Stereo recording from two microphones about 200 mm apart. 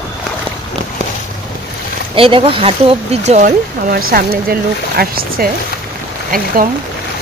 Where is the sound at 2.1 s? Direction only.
25° right (ahead or behind); by 6.7 s 45° right (ahead or behind).